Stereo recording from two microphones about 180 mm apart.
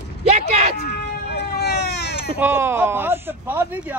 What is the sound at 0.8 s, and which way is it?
Baby cry, 65° left (ahead or behind).